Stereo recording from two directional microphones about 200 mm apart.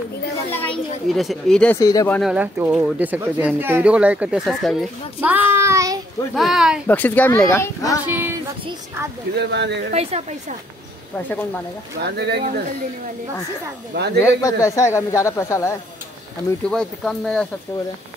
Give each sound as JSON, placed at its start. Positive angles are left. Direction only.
{"t": 0.5, "sound": "children playing", "side_deg": 10}
{"t": 1.0, "sound": "speech", "side_deg": 0}
{"t": 1.8, "sound": "a man's voice", "side_deg": 15}
{"t": 2.1, "sound": "speech", "side_deg": -5}
{"t": 6.3, "sound": "speech", "side_deg": 0}
{"t": 6.9, "sound": "a man's voice", "side_deg": 10}
{"t": 8.1, "sound": "music", "side_deg": -10}
{"t": 9.3, "sound": "speech", "side_deg": -60}
{"t": 11.1, "sound": "a man's voice", "side_deg": 10}
{"t": 12.0, "sound": "speech", "side_deg": -55}
{"t": 14.2, "sound": "a man's voice", "side_deg": 15}
{"t": 16.6, "sound": "speech", "side_deg": 5}